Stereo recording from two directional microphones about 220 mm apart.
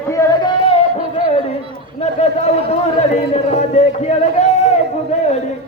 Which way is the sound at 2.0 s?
30° left (ahead or behind).